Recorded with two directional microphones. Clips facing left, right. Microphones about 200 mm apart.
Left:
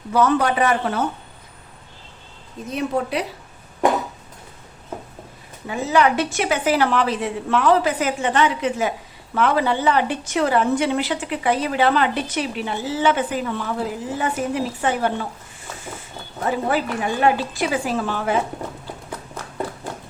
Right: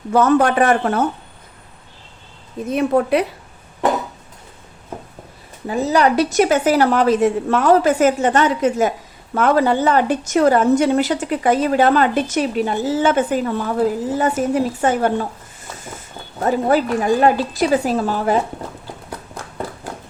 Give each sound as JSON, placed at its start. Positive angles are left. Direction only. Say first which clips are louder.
{"t": 0.1, "sound": "a woman's voice", "louder": "right 4 dB", "side_deg": -45}
{"t": 2.7, "sound": "a woman's voice", "louder": "right 7 dB", "side_deg": -55}
{"t": 5.6, "sound": "a woman's voice", "louder": "right 3 dB", "side_deg": -40}
{"t": 16.4, "sound": "a woman's voice", "louder": "right 5 dB", "side_deg": -40}